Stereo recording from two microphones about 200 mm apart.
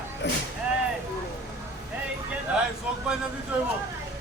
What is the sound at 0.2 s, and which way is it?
Vehicle, 60° left (ahead or behind).